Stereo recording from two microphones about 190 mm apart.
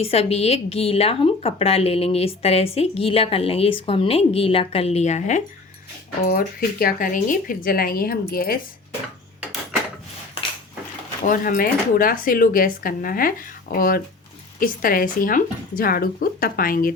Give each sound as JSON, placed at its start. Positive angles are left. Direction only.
{"t": 0.0, "sound": "a woman's voice", "side_deg": 30}
{"t": 6.2, "sound": "speech", "side_deg": 50}
{"t": 11.2, "sound": "speech", "side_deg": 45}